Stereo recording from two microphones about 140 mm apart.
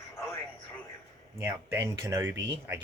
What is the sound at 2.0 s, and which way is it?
Speech, 15° right (ahead or behind).